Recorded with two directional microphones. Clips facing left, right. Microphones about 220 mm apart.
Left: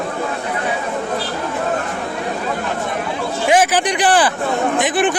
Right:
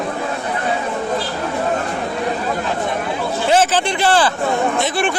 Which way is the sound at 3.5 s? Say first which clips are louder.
Left 1 dB; 15° left (ahead or behind).